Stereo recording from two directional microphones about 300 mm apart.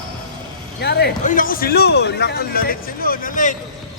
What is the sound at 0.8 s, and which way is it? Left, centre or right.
A man's voice, left.